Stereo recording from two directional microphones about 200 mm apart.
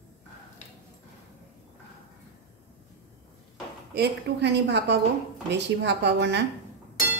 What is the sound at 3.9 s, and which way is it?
A woman's voice, 55° right (ahead or behind).